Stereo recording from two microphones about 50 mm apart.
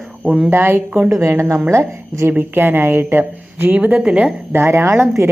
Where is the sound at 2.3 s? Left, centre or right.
Right.